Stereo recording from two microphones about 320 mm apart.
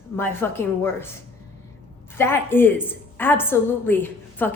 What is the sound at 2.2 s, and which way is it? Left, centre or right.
A woman's voice, centre.